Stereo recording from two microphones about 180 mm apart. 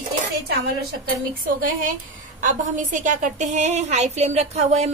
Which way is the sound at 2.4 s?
45° right (ahead or behind).